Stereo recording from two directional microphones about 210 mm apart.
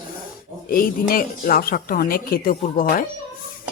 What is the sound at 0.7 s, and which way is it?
Speech, 45° left (ahead or behind).